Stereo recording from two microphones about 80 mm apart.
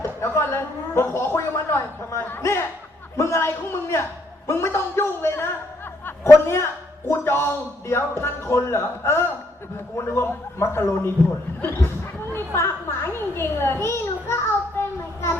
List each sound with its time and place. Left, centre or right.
0.0 s a man's voice: left
6.1 s a sound: left
7.1 s a man's voice: left
12.3 s chatter: left
13.1 s children playing: left
14.8 s child singing: left